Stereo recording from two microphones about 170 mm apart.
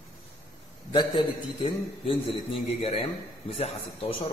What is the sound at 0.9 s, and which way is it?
A man's voice, 30° left (ahead or behind).